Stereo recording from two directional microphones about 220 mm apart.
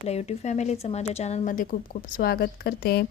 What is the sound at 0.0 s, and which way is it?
A woman's voice, 30° left (ahead or behind).